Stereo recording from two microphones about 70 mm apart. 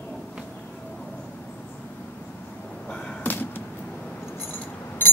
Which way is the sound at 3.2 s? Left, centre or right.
Left.